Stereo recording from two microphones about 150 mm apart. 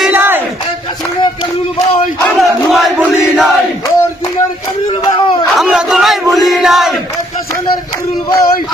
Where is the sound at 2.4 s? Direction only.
Centre (ahead or behind).